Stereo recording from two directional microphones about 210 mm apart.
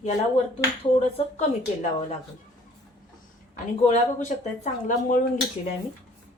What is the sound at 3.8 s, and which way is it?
Speech, 35° left (ahead or behind).